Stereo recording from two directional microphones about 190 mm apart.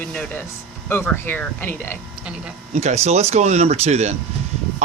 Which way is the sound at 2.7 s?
35° right (ahead or behind).